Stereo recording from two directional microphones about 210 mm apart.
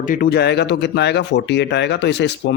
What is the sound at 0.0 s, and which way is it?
Speech, 40° left (ahead or behind).